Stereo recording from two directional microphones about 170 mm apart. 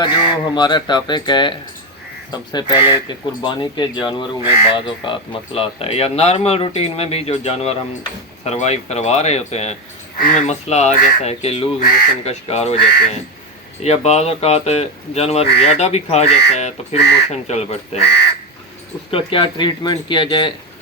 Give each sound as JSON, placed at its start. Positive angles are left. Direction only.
{"t": 0.0, "sound": "speech", "side_deg": 25}
{"t": 13.8, "sound": "speech", "side_deg": 40}
{"t": 18.0, "sound": "speech", "side_deg": 80}
{"t": 19.1, "sound": "speech", "side_deg": 30}